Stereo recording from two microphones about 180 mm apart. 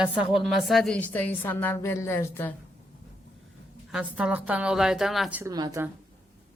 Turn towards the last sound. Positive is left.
turn(degrees=-20)  # may be behind; listen again after turning